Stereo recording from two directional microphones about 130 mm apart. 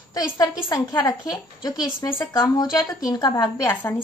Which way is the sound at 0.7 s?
30° left (ahead or behind).